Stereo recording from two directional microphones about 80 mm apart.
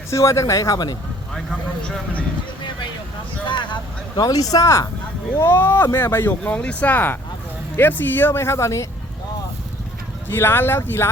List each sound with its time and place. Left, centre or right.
0.1 s speech: left
3.5 s speech: left
5.4 s speech: left
10.2 s speech: left